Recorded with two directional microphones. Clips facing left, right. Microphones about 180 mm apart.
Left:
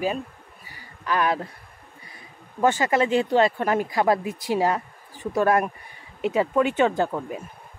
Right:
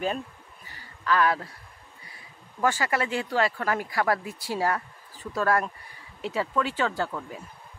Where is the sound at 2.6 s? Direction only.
20° left (ahead or behind).